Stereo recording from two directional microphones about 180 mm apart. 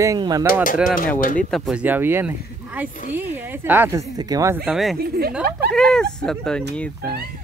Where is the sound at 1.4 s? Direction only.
5° left (ahead or behind).